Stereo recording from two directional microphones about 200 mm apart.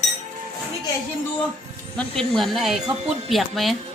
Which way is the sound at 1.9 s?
Centre (ahead or behind).